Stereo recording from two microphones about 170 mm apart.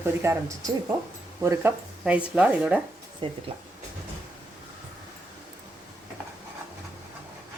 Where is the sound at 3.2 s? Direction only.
30° right (ahead or behind).